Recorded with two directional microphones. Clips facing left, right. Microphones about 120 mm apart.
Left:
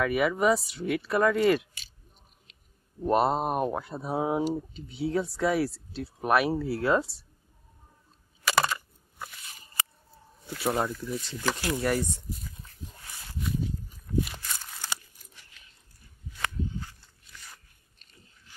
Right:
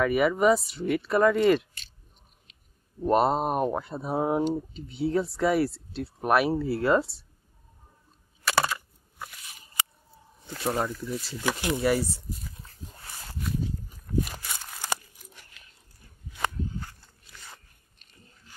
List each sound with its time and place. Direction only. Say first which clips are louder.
0.0 s speech: right 3 dB; centre (ahead or behind)
3.0 s speech: right 2 dB; centre (ahead or behind)
8.5 s crushing: even; centre (ahead or behind)
10.6 s speech: even; centre (ahead or behind)
14.1 s walk: even; 50° right (ahead or behind)